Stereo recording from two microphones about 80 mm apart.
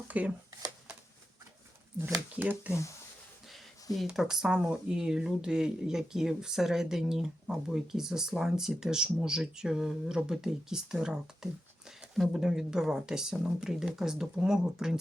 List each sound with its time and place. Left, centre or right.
0.1 s speech: centre
2.0 s speech: right
2.3 s speech: right
3.9 s speech: centre